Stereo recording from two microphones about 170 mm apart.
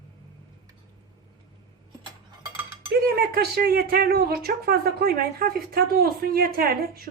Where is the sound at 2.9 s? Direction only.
70° right (ahead or behind).